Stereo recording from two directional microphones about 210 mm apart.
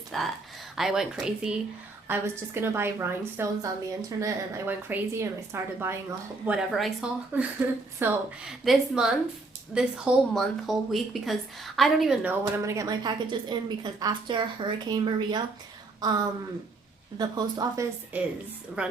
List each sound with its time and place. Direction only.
0.1 s a woman's voice: centre (ahead or behind); by 17.8 s 20° right (ahead or behind)
18.1 s a woman's voice: 10° right (ahead or behind)